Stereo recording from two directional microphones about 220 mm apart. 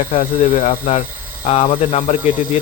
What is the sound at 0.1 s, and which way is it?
Speech, 25° left (ahead or behind).